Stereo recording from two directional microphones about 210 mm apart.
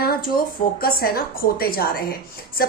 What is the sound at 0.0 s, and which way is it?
A woman's voice, 45° left (ahead or behind).